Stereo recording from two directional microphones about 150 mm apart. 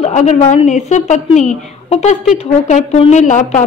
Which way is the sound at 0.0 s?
50° left (ahead or behind).